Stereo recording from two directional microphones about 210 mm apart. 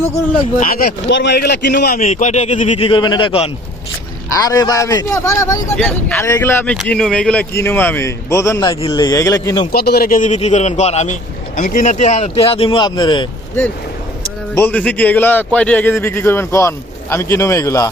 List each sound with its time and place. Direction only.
0.6 s speech: 45° left (ahead or behind)
2.0 s a man's voice: 35° left (ahead or behind); by 9.6 s 15° left (ahead or behind)
9.7 s speech: 50° left (ahead or behind); by 13.2 s 20° left (ahead or behind)
14.5 s a man's voice: 10° left (ahead or behind)